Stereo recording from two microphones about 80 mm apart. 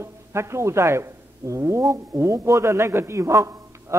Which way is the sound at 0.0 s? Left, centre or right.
Right.